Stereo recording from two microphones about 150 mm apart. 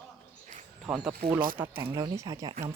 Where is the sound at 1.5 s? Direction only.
30° right (ahead or behind).